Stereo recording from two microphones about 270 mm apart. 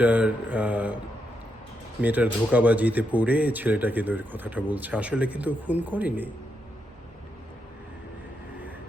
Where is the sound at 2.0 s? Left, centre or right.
Centre.